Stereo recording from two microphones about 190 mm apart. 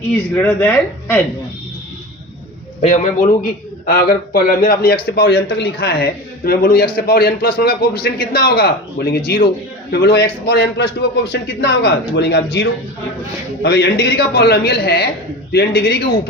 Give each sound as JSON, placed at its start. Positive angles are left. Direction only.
{"t": 0.1, "sound": "speech", "side_deg": 10}
{"t": 2.8, "sound": "a man's voice", "side_deg": 40}
{"t": 3.8, "sound": "a man's voice", "side_deg": 55}